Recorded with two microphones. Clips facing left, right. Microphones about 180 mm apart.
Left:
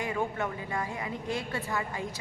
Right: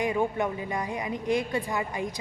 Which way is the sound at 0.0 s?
15° right (ahead or behind).